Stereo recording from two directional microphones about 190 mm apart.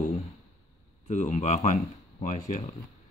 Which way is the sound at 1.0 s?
40° left (ahead or behind).